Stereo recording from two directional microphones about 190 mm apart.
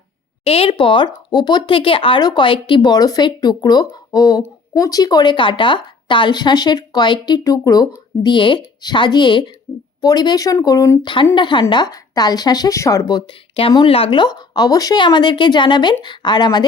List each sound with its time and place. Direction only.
0.4 s speech: 30° left (ahead or behind)